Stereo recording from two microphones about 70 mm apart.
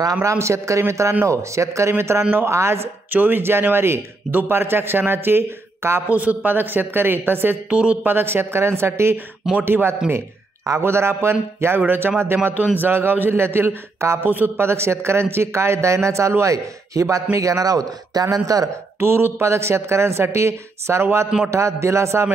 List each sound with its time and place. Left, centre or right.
0.0 s a man's voice: right
3.1 s a man's voice: right
6.0 s speech: right
7.7 s a man's voice: centre; by 18.7 s right
18.9 s a man's voice: right